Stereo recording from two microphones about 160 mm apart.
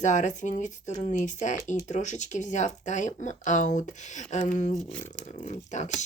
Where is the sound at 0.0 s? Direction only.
50° left (ahead or behind).